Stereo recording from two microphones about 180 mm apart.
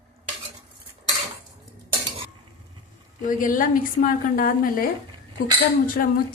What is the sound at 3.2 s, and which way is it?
Speech, 50° left (ahead or behind).